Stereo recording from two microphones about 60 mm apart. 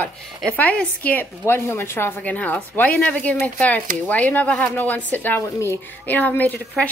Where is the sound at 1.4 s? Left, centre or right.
Left.